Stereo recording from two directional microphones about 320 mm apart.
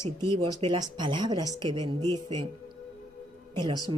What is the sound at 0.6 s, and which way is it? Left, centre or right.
Speech, centre.